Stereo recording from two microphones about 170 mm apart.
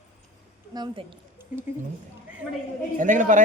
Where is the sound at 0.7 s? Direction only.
25° right (ahead or behind).